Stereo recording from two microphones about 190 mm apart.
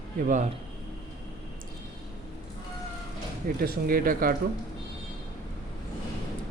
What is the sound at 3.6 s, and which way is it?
Speech, 50° right (ahead or behind).